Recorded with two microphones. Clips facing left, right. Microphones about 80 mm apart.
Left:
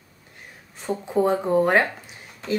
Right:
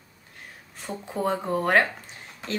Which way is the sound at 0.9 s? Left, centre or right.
Centre.